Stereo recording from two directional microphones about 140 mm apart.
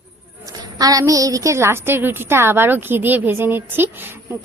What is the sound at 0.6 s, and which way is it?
Speech, 25° right (ahead or behind).